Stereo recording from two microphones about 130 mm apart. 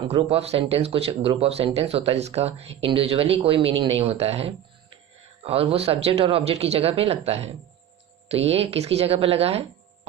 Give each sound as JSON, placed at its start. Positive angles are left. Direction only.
{"t": 0.1, "sound": "speech", "side_deg": -50}